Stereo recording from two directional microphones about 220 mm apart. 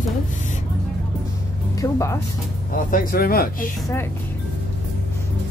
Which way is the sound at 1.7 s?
15° left (ahead or behind).